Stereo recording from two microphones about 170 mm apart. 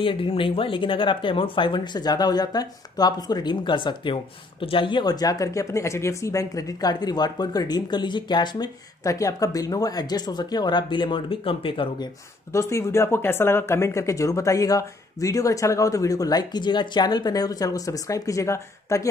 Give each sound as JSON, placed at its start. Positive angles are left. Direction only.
{"t": 0.0, "sound": "speech", "side_deg": 30}
{"t": 12.5, "sound": "speech", "side_deg": 15}